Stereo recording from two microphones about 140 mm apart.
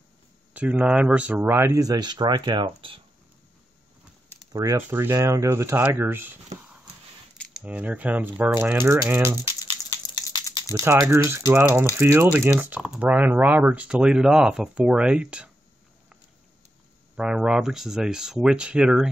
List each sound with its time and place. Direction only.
0.5 s speech: 10° right (ahead or behind); by 3.0 s 35° right (ahead or behind)
4.5 s speech: 25° right (ahead or behind)
7.3 s a sound: centre (ahead or behind)
7.6 s speech: 10° right (ahead or behind)
9.6 s a sound: 30° left (ahead or behind)
10.7 s speech: 20° right (ahead or behind)
17.2 s speech: 5° right (ahead or behind)